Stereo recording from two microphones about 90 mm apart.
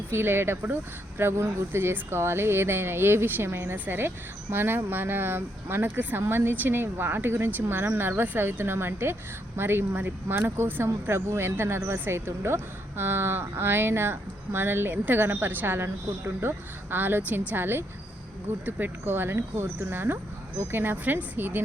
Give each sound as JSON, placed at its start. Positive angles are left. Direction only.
{"t": 0.1, "sound": "speech", "side_deg": -25}